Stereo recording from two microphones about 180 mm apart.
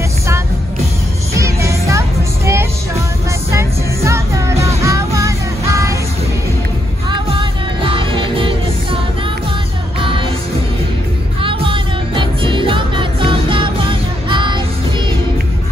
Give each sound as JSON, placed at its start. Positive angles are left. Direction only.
{"t": 1.3, "sound": "music", "side_deg": -15}
{"t": 7.1, "sound": "music", "side_deg": -30}
{"t": 11.4, "sound": "music", "side_deg": -30}